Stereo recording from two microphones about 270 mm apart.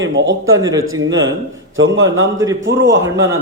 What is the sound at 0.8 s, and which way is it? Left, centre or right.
Speech, right.